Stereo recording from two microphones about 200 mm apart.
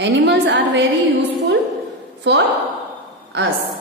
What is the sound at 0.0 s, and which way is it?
Speech, 60° right (ahead or behind).